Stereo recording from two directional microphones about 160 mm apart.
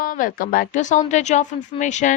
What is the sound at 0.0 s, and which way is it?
Speech, 55° left (ahead or behind).